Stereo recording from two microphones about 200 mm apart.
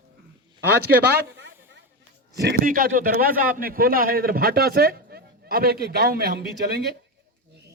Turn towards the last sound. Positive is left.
turn(degrees=-55)  # may be behind; listen again after turning